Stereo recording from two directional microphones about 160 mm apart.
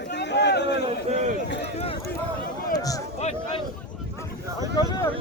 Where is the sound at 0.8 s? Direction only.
45° right (ahead or behind).